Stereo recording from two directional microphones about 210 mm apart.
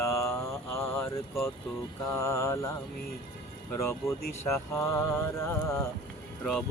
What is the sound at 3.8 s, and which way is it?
Speech, 10° left (ahead or behind).